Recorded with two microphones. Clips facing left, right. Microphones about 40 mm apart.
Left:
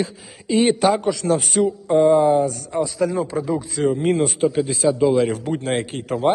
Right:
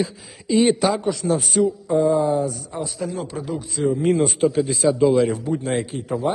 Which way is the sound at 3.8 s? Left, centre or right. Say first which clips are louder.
Even; left.